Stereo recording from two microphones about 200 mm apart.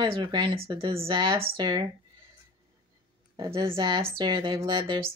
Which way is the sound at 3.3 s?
25° right (ahead or behind).